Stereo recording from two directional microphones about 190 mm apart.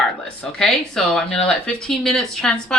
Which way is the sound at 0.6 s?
Centre (ahead or behind).